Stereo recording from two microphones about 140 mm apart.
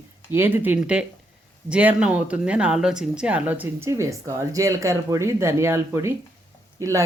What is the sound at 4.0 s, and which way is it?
Speech, 20° right (ahead or behind).